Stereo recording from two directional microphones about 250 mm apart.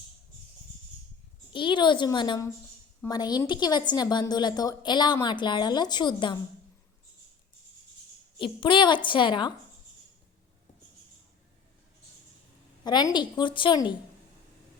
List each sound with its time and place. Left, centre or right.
1.5 s a woman's voice: centre
8.4 s a woman's voice: centre
12.8 s a woman's voice: centre